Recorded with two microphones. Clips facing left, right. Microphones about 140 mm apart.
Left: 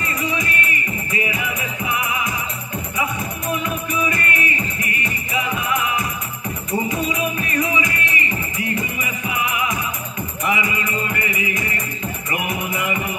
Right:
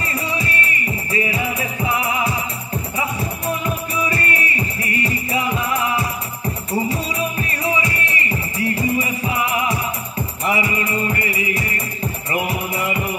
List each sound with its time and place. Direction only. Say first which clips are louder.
0.0 s music: even; 35° right (ahead or behind)